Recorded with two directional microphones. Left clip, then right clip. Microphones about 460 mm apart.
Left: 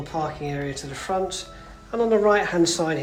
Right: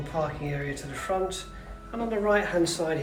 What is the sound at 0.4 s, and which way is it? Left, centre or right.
Speech, centre.